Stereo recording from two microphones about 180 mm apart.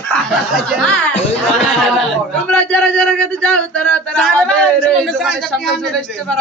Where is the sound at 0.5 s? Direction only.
5° left (ahead or behind).